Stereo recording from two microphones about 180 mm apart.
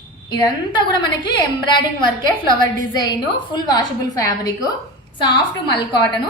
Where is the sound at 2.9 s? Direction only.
25° left (ahead or behind).